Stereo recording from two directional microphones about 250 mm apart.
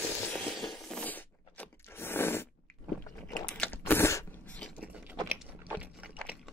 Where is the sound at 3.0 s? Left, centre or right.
Centre.